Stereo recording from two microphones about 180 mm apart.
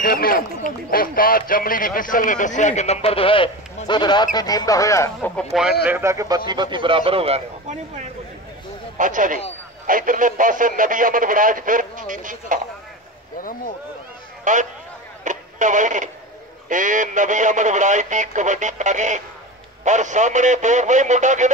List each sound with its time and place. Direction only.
0.0 s a man's voice: 55° left (ahead or behind); by 5.8 s centre (ahead or behind)
5.9 s a man's voice: 15° right (ahead or behind); by 7.4 s 30° right (ahead or behind)
8.9 s speech: 45° right (ahead or behind)
14.4 s speech: 45° right (ahead or behind)